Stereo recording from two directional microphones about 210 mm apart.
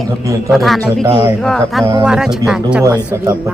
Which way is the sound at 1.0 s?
20° right (ahead or behind).